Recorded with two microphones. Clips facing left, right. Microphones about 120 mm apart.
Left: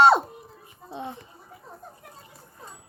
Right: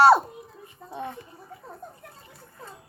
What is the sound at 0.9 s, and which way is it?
Speech, 20° left (ahead or behind).